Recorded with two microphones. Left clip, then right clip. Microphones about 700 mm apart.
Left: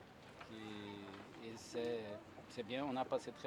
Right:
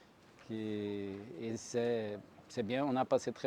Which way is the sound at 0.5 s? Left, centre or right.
Right.